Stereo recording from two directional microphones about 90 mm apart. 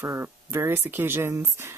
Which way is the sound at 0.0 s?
30° right (ahead or behind).